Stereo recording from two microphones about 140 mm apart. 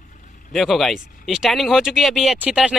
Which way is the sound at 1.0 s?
75° left (ahead or behind).